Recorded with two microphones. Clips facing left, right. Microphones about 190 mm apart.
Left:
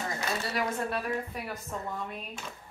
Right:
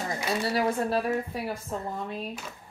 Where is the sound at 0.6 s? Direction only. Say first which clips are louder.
Right 6 dB; 35° right (ahead or behind).